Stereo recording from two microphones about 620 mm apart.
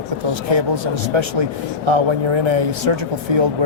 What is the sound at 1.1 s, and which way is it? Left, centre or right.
Speech, right.